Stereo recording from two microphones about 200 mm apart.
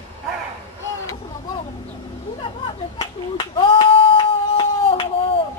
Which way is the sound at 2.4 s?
25° left (ahead or behind).